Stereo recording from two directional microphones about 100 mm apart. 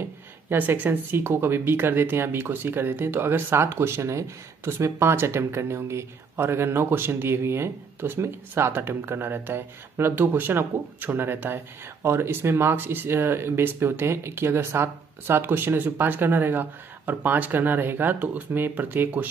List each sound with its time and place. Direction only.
0.5 s speech: 20° right (ahead or behind)